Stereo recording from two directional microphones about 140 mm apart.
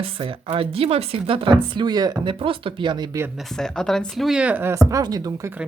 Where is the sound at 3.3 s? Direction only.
5° left (ahead or behind); by 5.5 s 25° right (ahead or behind).